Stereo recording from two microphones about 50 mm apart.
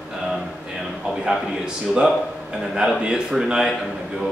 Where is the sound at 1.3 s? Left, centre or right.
Centre.